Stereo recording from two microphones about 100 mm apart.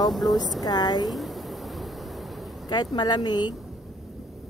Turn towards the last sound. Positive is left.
turn(degrees=50)  # may be behind; listen again after turning